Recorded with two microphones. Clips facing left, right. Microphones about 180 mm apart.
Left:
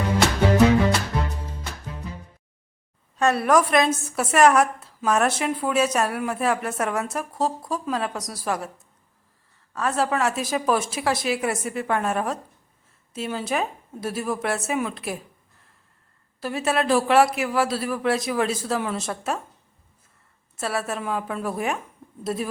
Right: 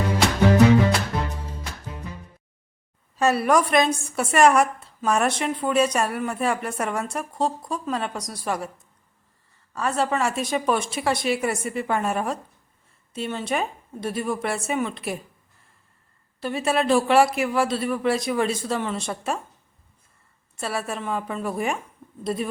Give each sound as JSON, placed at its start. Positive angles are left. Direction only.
{"t": 3.2, "sound": "a woman's voice", "side_deg": 0}
{"t": 9.7, "sound": "a woman's voice", "side_deg": 0}
{"t": 16.4, "sound": "a woman's voice", "side_deg": 0}
{"t": 20.6, "sound": "a woman's voice", "side_deg": 0}